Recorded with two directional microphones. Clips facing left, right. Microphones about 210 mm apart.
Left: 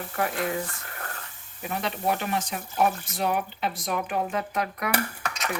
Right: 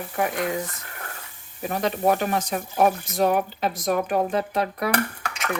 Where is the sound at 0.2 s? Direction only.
20° right (ahead or behind).